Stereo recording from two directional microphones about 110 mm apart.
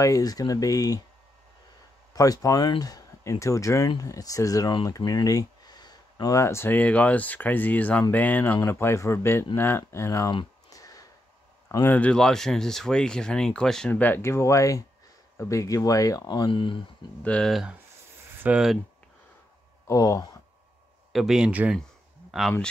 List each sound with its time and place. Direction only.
0.0 s speech: 30° left (ahead or behind)
2.1 s speech: 35° left (ahead or behind)
10.7 s a sound: 30° left (ahead or behind)
11.7 s speech: 20° left (ahead or behind); by 16.8 s 50° left (ahead or behind)
17.2 s speech: 10° left (ahead or behind)
17.5 s speech: centre (ahead or behind)
19.9 s speech: 30° left (ahead or behind)
21.1 s speech: 5° right (ahead or behind)